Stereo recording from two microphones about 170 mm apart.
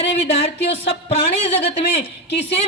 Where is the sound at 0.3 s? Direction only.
35° left (ahead or behind).